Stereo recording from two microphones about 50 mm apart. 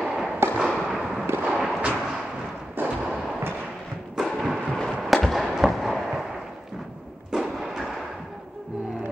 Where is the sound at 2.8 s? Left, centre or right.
Right.